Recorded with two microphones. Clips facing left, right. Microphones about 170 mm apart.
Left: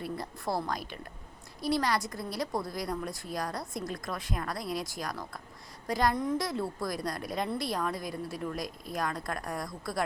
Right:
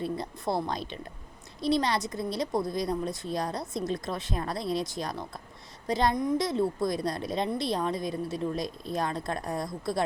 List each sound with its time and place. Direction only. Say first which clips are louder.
0.0 s a woman's voice: right 4 dB; 20° right (ahead or behind)